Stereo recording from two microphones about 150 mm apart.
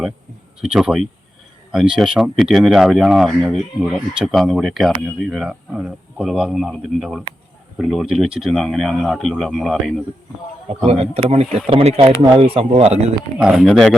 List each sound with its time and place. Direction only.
0.6 s speech: 5° right (ahead or behind)
10.8 s speech: 45° right (ahead or behind)
13.4 s speech: 5° right (ahead or behind)